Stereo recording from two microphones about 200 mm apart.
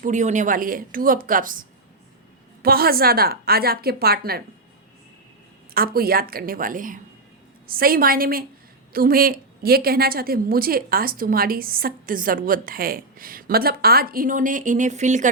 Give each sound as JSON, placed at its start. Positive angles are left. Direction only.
{"t": 0.0, "sound": "a woman's voice", "side_deg": -35}
{"t": 5.7, "sound": "a woman's voice", "side_deg": -50}